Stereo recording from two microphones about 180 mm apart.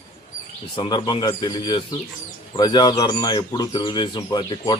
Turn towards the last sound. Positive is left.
turn(degrees=25)  # may be behind; listen again after turning